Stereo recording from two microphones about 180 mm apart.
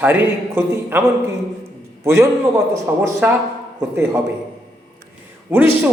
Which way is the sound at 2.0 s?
15° right (ahead or behind).